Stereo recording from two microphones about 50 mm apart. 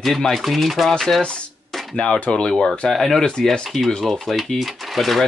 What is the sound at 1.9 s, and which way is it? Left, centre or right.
Speech, left.